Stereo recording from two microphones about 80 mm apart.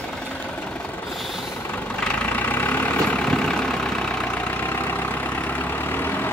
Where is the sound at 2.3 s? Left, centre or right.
Left.